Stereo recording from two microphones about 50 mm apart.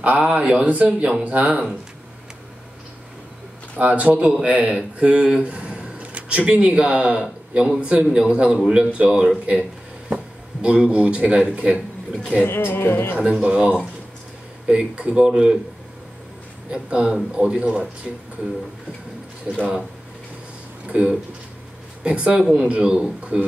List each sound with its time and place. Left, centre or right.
0.0 s speech: right
3.7 s speech: right
12.4 s speech: left
13.2 s speech: centre
16.7 s speech: centre
19.5 s speech: right
20.8 s speech: right